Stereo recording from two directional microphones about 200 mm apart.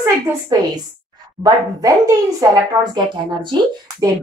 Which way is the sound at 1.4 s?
15° right (ahead or behind).